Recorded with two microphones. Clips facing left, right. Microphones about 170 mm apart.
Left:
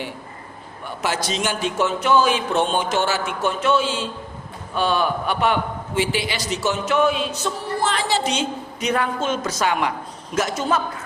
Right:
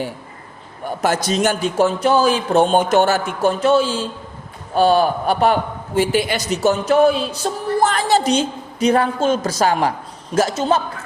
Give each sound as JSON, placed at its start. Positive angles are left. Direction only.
{"t": 0.9, "sound": "a man's voice", "side_deg": -45}
{"t": 3.4, "sound": "a man's voice", "side_deg": -35}